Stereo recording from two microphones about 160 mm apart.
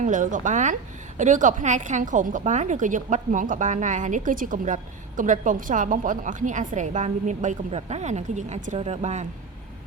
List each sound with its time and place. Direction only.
0.0 s speech: 55° right (ahead or behind)